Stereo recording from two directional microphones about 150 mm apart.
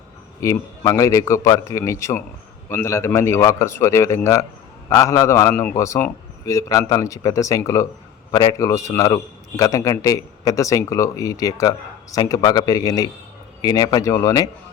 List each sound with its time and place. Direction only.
0.4 s a man's voice: 20° left (ahead or behind)